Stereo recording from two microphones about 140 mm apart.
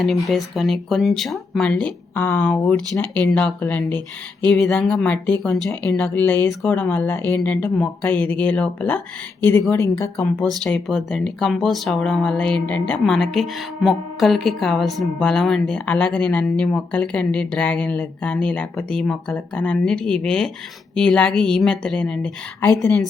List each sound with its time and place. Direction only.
0.0 s speech: centre (ahead or behind); by 10.1 s 20° left (ahead or behind)
10.6 s speech: 5° left (ahead or behind)